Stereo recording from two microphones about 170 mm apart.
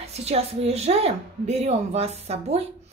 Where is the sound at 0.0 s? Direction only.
40° right (ahead or behind).